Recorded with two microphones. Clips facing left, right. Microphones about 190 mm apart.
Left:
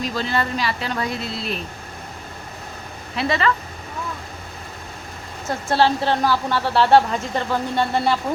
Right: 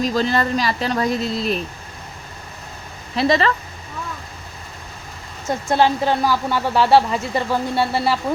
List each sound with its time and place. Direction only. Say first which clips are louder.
0.0 s speech: right 4 dB; 40° right (ahead or behind)
3.2 s speech: right 4 dB; 35° right (ahead or behind)
5.6 s speech: right 1 dB; 10° right (ahead or behind)